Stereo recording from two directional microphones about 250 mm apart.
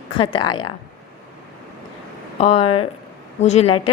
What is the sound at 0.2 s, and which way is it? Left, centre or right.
Speech, centre.